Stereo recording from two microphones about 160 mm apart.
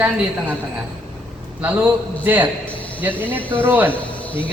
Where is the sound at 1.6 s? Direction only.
10° right (ahead or behind).